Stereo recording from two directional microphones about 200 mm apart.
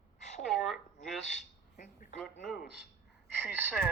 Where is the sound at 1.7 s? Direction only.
40° left (ahead or behind).